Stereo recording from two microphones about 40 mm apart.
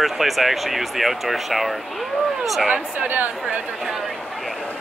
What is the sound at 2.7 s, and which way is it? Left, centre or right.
Speech, right.